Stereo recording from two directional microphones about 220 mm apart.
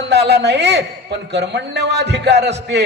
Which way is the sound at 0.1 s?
50° right (ahead or behind).